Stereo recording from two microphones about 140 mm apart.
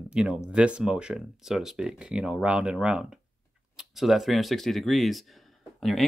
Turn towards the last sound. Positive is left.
turn(degrees=0)  # may be behind; listen again after turning